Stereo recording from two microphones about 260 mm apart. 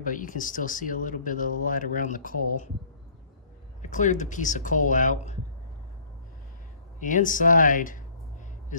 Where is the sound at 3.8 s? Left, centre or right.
Left.